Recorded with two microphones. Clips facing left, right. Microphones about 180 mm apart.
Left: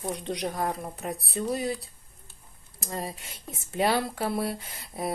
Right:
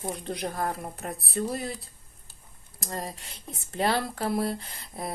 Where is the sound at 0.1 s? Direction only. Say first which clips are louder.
Left 3 dB; centre (ahead or behind).